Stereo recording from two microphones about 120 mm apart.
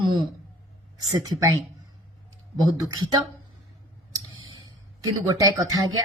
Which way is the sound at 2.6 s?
30° right (ahead or behind).